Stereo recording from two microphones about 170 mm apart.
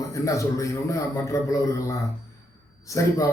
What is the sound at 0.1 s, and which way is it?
A man's voice, 20° left (ahead or behind).